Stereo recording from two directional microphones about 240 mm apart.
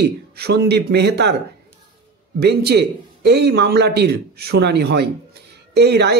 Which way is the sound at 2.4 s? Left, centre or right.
Right.